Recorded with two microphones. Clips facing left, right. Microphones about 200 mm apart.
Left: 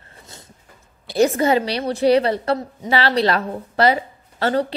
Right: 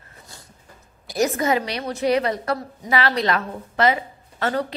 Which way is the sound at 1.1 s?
30° left (ahead or behind).